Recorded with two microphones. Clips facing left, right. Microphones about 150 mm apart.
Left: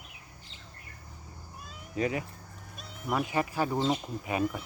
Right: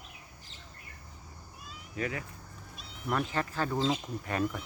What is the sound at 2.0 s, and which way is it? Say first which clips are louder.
Speech: left 5 dB; 20° left (ahead or behind).